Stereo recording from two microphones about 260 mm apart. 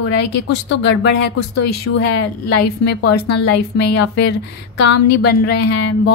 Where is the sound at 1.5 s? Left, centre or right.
Left.